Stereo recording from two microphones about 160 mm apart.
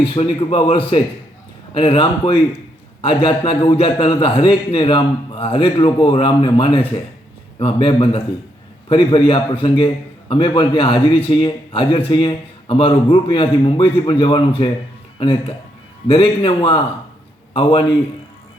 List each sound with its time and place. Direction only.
0.1 s a man's voice: 35° left (ahead or behind)